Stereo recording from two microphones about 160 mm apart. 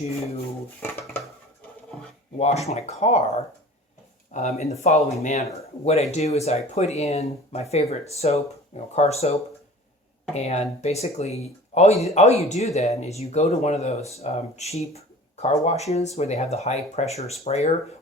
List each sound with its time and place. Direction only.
2.4 s speech: 45° left (ahead or behind)
4.4 s speech: 45° left (ahead or behind)